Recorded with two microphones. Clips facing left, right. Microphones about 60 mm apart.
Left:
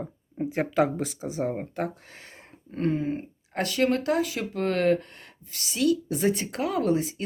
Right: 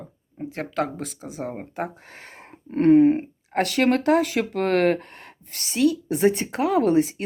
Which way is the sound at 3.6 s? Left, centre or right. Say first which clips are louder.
Right 4 dB; right.